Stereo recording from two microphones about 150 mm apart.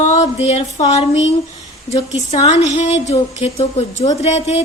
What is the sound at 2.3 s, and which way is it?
A woman's voice, 50° left (ahead or behind).